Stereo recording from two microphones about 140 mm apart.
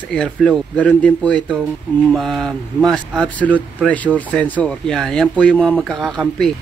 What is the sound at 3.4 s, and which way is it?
Speech, 10° right (ahead or behind).